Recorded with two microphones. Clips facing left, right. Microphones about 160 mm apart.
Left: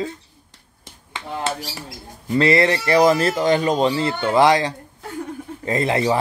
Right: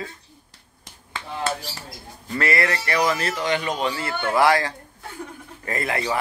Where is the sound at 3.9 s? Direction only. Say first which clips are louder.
Left 5 dB; 25° left (ahead or behind).